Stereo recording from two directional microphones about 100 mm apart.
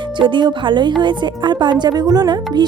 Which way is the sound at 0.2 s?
50° right (ahead or behind).